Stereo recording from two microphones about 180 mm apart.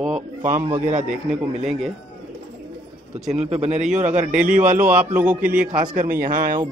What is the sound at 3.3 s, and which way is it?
A man's voice, 35° right (ahead or behind).